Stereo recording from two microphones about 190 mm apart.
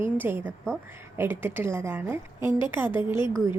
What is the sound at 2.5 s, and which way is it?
Speech, 25° left (ahead or behind).